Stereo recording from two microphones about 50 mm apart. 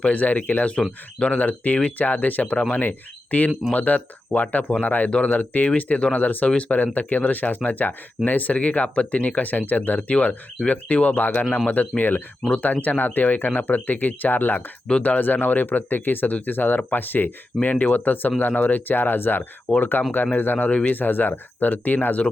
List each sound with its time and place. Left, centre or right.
0.0 s speech: left